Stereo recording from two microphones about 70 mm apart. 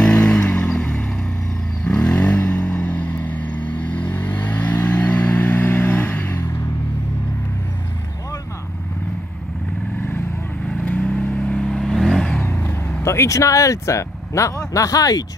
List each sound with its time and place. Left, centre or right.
0.0 s vehicle: centre
10.7 s vehicle: centre
11.5 s vehicle: centre
12.3 s vehicle: left
13.0 s speech: left